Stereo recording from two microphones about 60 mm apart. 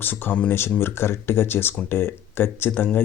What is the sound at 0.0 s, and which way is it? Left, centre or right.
Speech, left.